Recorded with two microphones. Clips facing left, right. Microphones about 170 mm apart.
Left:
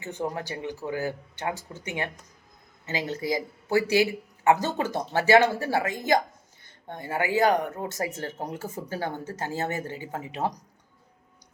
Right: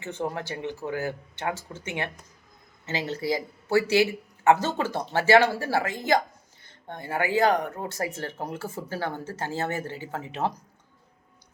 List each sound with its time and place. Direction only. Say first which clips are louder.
0.3 s speech: right 1 dB; 15° left (ahead or behind)
2.8 s a woman's voice: right 1 dB; 15° left (ahead or behind)